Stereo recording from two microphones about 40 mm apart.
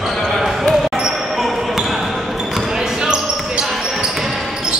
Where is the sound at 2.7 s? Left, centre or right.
Centre.